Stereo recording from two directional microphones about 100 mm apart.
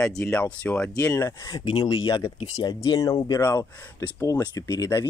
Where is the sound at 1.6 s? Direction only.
50° left (ahead or behind).